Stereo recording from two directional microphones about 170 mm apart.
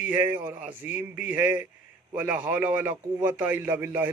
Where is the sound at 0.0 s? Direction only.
10° right (ahead or behind).